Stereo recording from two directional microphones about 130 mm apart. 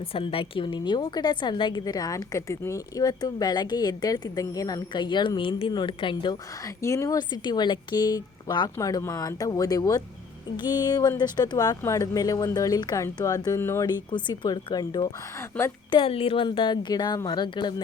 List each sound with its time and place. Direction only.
0.1 s a woman's voice: 45° left (ahead or behind)
6.8 s a woman's voice: 25° left (ahead or behind)
13.8 s a woman's voice: 35° left (ahead or behind)
15.5 s a woman's voice: 10° left (ahead or behind)
15.9 s a woman's voice: 45° left (ahead or behind)